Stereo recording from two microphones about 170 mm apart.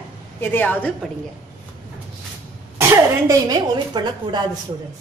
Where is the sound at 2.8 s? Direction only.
20° right (ahead or behind).